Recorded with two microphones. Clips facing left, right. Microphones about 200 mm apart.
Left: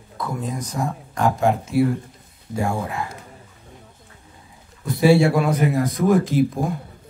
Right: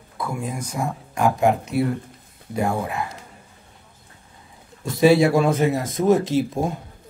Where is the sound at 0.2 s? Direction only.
10° right (ahead or behind).